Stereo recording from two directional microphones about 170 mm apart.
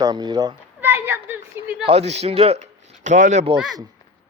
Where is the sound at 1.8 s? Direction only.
35° right (ahead or behind).